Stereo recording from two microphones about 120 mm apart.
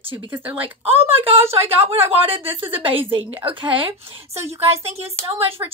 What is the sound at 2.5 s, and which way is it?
Speech, 20° right (ahead or behind).